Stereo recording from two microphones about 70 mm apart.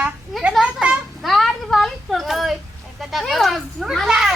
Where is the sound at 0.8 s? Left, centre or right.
Centre.